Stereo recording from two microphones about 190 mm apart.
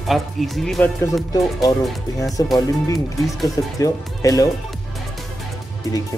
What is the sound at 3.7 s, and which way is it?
Speech, 20° left (ahead or behind).